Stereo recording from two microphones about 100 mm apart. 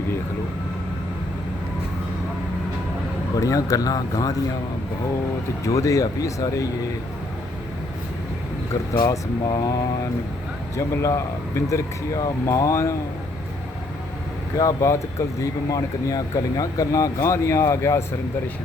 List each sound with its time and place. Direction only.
3.4 s speech: 35° left (ahead or behind)
5.6 s speech: 35° left (ahead or behind)
9.0 s speech: 45° left (ahead or behind)
14.6 s speech: 35° left (ahead or behind)